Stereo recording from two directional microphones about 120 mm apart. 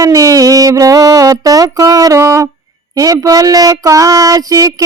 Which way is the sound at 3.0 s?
30° right (ahead or behind).